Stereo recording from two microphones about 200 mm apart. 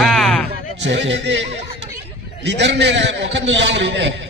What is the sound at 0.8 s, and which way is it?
Speech, 65° right (ahead or behind).